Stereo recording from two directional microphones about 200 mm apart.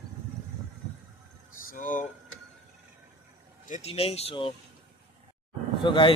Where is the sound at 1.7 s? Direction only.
40° left (ahead or behind).